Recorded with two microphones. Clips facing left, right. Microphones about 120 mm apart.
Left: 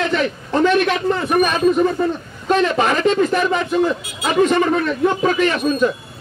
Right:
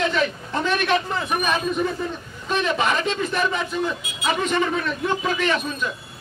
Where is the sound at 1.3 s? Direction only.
60° left (ahead or behind).